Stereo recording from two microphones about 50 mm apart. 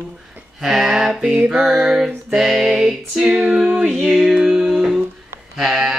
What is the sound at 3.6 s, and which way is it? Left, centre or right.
Music, right.